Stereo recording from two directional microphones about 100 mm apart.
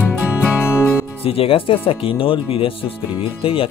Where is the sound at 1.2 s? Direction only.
70° left (ahead or behind).